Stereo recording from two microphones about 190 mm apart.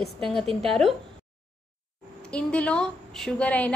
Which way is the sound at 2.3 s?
5° left (ahead or behind).